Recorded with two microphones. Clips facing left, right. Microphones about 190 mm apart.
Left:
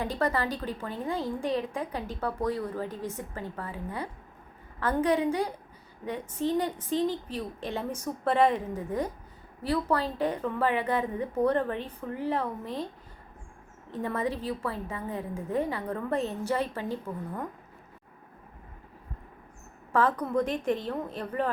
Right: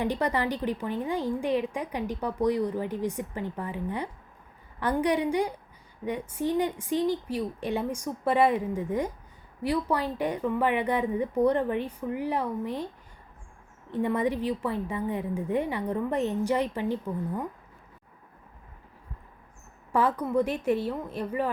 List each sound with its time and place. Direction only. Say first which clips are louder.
0.0 s a woman's voice: right 2 dB; 15° right (ahead or behind)
13.9 s a woman's voice: right 4 dB; 15° right (ahead or behind)
19.9 s a woman's voice: right 1 dB; 10° right (ahead or behind)